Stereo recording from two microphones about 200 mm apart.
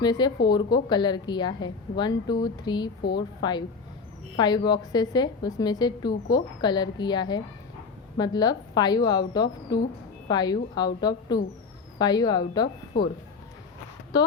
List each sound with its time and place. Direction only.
0.0 s a woman's voice: 20° left (ahead or behind)
14.1 s speech: 20° left (ahead or behind)